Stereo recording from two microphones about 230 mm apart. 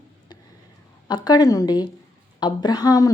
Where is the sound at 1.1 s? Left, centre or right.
Centre.